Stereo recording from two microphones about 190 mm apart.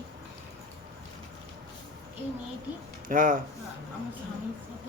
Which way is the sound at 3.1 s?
45° right (ahead or behind).